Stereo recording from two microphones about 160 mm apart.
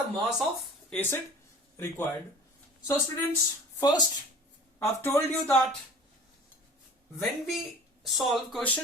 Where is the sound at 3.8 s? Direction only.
25° left (ahead or behind).